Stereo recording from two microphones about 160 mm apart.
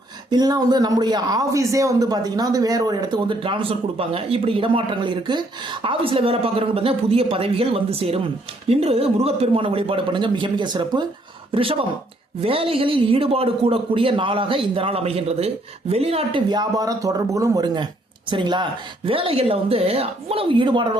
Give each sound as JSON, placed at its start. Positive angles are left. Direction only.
{"t": 0.3, "sound": "a man's voice", "side_deg": -25}